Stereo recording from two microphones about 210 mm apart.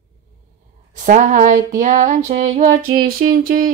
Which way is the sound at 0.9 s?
35° right (ahead or behind).